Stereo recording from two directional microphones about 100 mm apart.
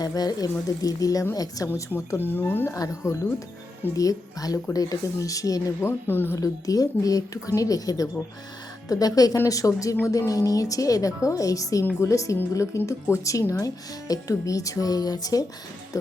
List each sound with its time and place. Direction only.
0.0 s speech: 40° left (ahead or behind)
2.0 s speech: 20° left (ahead or behind)
2.7 s speech: 35° left (ahead or behind)
5.8 s speech: 20° left (ahead or behind)
6.3 s speech: 35° left (ahead or behind)